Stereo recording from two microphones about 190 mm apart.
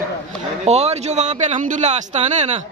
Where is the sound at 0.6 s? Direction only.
35° right (ahead or behind).